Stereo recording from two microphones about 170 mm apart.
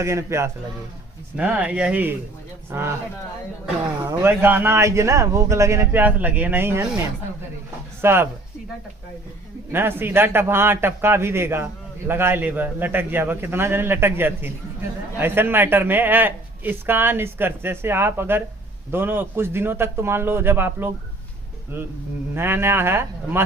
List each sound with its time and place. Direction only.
0.0 s a man's voice: 15° right (ahead or behind)
4.2 s a man's voice: 10° right (ahead or behind)
8.0 s a man's voice: 15° right (ahead or behind)
9.7 s a man's voice: 15° right (ahead or behind)